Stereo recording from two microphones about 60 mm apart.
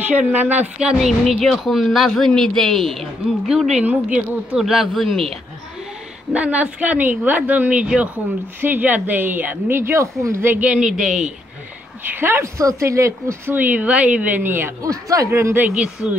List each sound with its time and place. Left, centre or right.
0.1 s a woman's voice: right
0.9 s speech: centre
3.4 s a man's voice: centre
3.7 s a woman's voice: right
4.6 s speech: centre
6.3 s a woman's voice: right
9.8 s speech: right
10.6 s a man's voice: centre
11.0 s a man's voice: centre
12.0 s speech: right
12.5 s speech: right
13.5 s a woman's voice: right
14.8 s speech: right
15.8 s a man's voice: centre